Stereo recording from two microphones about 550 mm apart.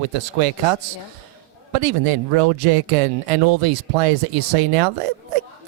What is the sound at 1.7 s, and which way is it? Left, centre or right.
Speech, right.